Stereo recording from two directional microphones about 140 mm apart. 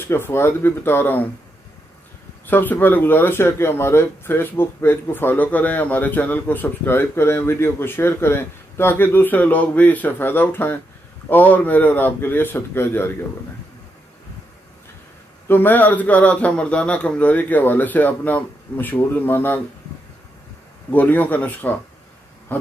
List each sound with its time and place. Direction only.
0.0 s speech: 15° left (ahead or behind)
2.4 s speech: 15° left (ahead or behind)
15.4 s speech: 15° left (ahead or behind)
20.9 s speech: 15° left (ahead or behind)